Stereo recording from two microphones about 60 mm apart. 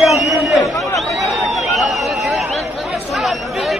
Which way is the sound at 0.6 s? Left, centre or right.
Left.